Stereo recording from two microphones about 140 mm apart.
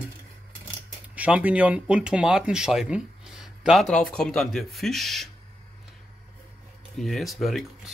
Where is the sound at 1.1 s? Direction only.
10° right (ahead or behind).